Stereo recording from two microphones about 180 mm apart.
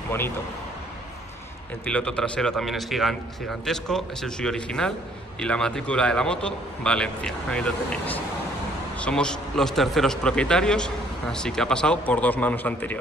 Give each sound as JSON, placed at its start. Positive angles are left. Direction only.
{"t": 1.9, "sound": "a man's voice", "side_deg": 5}